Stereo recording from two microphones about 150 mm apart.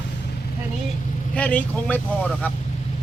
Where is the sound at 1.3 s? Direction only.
10° left (ahead or behind).